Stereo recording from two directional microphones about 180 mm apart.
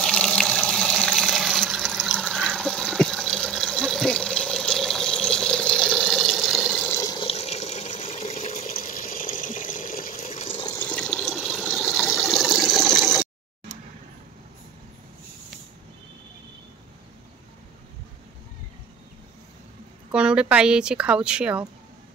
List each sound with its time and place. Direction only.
0.0 s water: 5° left (ahead or behind); by 8.7 s 35° left (ahead or behind)
8.7 s water: 50° left (ahead or behind)
10.6 s water: 20° left (ahead or behind)
10.9 s water: 5° left (ahead or behind)
20.1 s a woman's voice: 5° right (ahead or behind)